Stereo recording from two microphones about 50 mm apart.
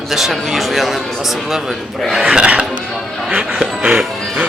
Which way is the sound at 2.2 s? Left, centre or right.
Right.